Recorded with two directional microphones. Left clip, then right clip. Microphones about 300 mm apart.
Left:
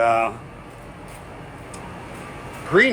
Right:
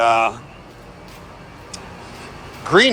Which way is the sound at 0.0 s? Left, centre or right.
Centre.